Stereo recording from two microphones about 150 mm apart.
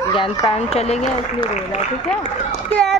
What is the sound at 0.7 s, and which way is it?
Speech, 50° left (ahead or behind).